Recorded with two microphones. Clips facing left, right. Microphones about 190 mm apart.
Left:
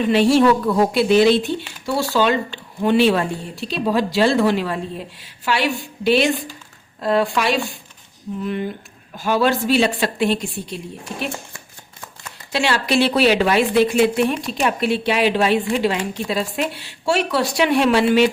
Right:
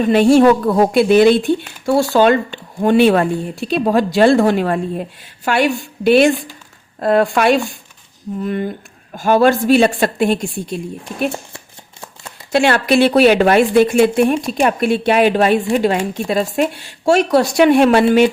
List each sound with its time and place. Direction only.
0.0 s a woman's voice: 50° right (ahead or behind)
11.5 s shuffling cards: 30° right (ahead or behind)
12.5 s a woman's voice: 50° right (ahead or behind)